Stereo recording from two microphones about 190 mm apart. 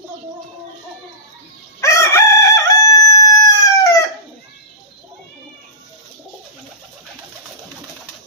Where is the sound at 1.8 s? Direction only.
15° left (ahead or behind).